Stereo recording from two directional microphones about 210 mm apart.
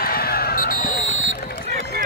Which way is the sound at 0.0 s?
45° left (ahead or behind).